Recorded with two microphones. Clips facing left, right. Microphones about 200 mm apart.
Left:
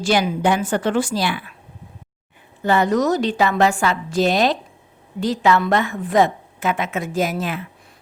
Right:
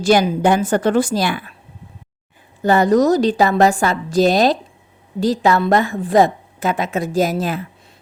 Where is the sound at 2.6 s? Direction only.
40° right (ahead or behind).